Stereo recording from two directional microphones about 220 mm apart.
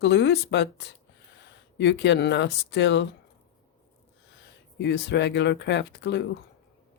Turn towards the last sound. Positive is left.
turn(degrees=50)  # may be behind; listen again after turning